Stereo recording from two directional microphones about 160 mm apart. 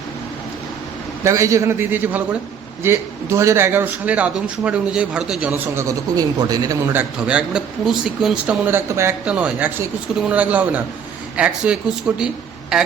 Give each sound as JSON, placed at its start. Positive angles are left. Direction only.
{"t": 1.2, "sound": "a man's voice", "side_deg": -20}
{"t": 6.9, "sound": "a man's voice", "side_deg": -5}